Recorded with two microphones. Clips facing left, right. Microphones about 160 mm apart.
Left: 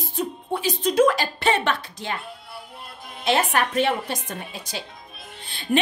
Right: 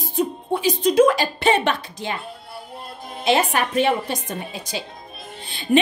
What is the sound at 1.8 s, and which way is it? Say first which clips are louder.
Speech: right 2 dB; centre (ahead or behind).